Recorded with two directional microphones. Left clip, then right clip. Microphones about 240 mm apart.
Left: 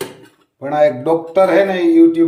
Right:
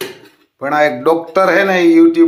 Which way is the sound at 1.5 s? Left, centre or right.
Centre.